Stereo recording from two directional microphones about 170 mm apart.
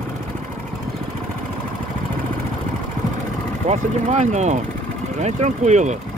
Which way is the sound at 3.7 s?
45° right (ahead or behind).